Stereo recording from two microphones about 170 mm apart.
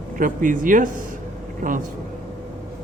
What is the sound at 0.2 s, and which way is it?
Speech, 50° right (ahead or behind).